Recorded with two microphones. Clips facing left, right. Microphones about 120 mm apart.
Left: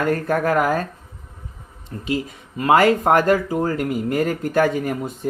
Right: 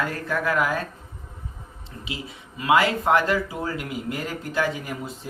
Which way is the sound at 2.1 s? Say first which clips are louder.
Left 12 dB; 45° left (ahead or behind).